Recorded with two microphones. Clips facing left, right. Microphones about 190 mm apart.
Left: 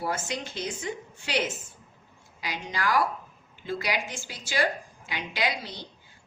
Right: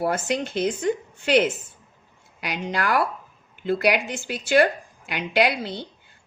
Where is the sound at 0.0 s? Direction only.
60° right (ahead or behind).